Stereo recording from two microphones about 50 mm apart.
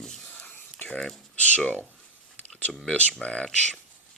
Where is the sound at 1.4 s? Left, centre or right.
Left.